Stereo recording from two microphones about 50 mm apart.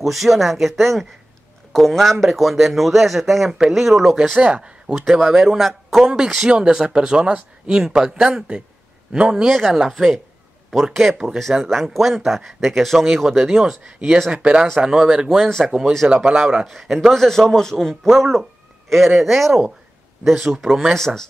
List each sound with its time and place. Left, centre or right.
0.0 s speech: centre
4.4 s speech: right
5.1 s speech: centre
9.5 s speech: centre
14.3 s speech: centre
15.4 s speech: centre
16.3 s speech: centre
16.8 s a man's voice: centre
20.9 s a man's voice: centre